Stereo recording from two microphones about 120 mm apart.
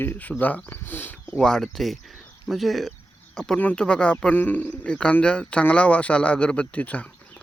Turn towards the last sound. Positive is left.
turn(degrees=10)  # may be behind; listen again after turning